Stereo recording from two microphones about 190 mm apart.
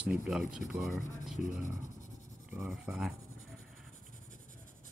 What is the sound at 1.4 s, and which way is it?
Speech, 40° left (ahead or behind).